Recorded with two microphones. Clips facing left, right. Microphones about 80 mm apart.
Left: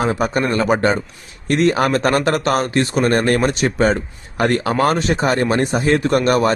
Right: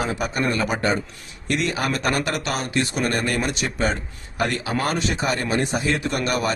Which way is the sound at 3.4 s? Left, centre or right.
Left.